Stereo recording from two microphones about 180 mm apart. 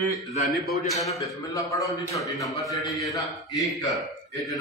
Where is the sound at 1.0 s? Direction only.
20° left (ahead or behind).